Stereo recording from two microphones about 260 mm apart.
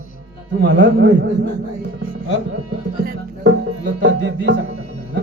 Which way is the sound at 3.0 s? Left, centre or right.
Right.